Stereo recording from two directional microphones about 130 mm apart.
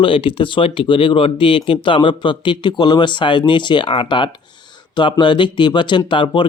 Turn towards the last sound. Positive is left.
turn(degrees=40)  # may be behind; listen again after turning